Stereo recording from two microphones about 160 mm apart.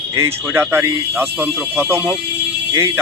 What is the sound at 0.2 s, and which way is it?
Speech, 15° right (ahead or behind).